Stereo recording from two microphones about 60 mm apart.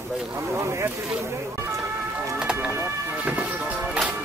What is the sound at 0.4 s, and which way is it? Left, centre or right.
Speech, right.